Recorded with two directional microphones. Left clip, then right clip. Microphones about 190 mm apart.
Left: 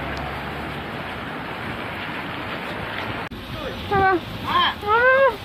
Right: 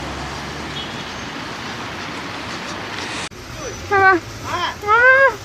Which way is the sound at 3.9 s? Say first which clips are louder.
Right 6 dB; 20° right (ahead or behind).